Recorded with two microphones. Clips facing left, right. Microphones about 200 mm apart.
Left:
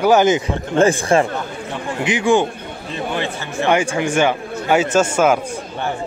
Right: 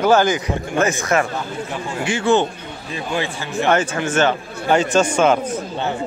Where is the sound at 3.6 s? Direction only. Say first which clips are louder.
Left 2 dB; 15° left (ahead or behind).